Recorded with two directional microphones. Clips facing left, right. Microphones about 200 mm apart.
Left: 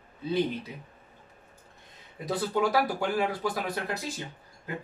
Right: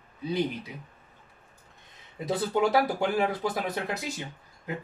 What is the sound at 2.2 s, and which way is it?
Speech, 25° right (ahead or behind).